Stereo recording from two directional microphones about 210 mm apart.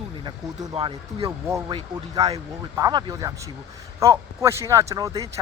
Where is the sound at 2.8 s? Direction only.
15° right (ahead or behind).